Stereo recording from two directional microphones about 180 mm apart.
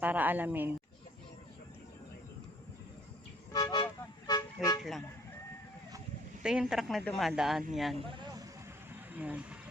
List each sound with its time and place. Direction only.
0.0 s a woman's voice: 10° right (ahead or behind)
3.5 s speech: 25° left (ahead or behind)
4.8 s speech: centre (ahead or behind)
6.4 s speech: 5° right (ahead or behind)
7.9 s a sound: 25° right (ahead or behind)
9.1 s a woman's voice: 10° right (ahead or behind)